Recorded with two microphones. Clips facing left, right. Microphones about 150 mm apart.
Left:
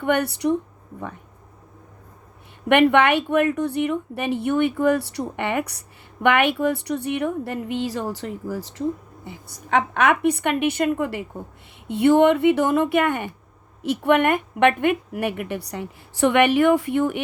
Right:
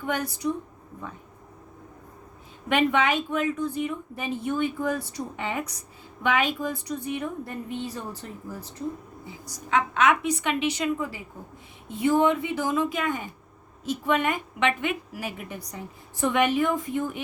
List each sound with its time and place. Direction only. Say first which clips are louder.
0.0 s a woman's voice: left 7 dB; 65° left (ahead or behind)
2.6 s a woman's voice: left 7 dB; 65° left (ahead or behind); by 8.8 s 90° left
9.2 s a woman's voice: left 2 dB; 60° left (ahead or behind)